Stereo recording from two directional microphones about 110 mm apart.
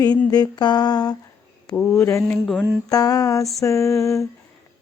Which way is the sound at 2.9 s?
35° left (ahead or behind).